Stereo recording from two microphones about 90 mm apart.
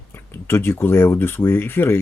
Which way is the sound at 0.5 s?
30° left (ahead or behind).